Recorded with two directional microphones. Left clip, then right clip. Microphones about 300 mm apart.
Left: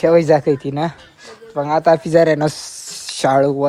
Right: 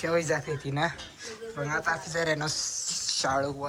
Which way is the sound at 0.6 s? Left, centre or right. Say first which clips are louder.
Left 8 dB; centre.